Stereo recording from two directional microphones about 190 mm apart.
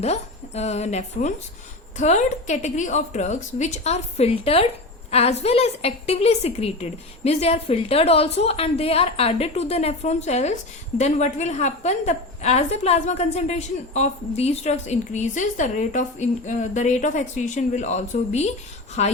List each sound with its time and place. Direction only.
0.0 s a woman's voice: 35° left (ahead or behind)